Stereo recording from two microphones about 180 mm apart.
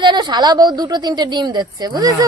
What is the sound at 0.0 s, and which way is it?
A woman's voice, 25° right (ahead or behind).